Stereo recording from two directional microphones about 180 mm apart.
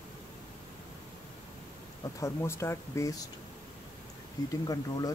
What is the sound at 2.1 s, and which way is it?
Speech, 15° left (ahead or behind).